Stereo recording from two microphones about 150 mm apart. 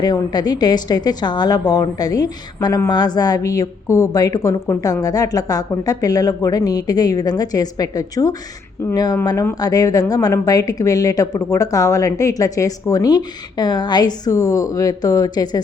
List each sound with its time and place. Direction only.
0.0 s a woman's voice: 25° left (ahead or behind)